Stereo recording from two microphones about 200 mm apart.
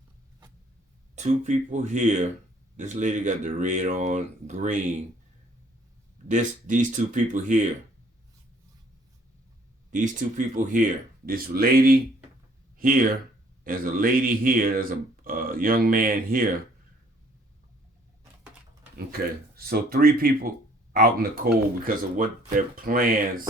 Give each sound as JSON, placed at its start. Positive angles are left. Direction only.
{"t": 1.1, "sound": "speech", "side_deg": -35}
{"t": 6.2, "sound": "speech", "side_deg": -40}
{"t": 9.9, "sound": "speech", "side_deg": -40}
{"t": 18.9, "sound": "speech", "side_deg": -50}